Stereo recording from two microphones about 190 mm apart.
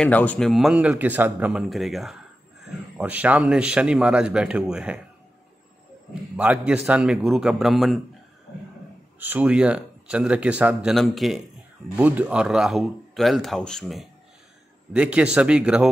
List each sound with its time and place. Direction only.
0.0 s speech: 10° left (ahead or behind)
6.3 s speech: 5° right (ahead or behind)
9.2 s speech: 10° right (ahead or behind)